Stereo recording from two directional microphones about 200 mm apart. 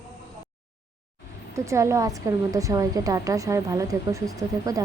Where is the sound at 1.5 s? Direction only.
15° right (ahead or behind).